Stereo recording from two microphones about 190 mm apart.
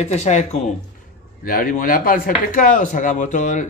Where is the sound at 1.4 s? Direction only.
50° left (ahead or behind).